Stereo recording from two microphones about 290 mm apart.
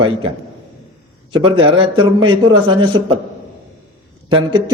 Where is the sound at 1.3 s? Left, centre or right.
Centre.